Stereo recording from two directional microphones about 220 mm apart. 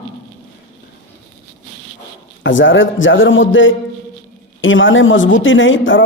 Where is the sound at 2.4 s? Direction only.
60° left (ahead or behind).